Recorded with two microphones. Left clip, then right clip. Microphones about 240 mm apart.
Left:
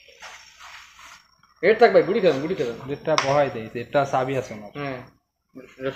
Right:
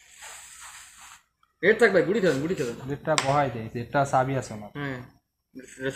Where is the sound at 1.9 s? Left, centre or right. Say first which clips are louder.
Left 4 dB; centre.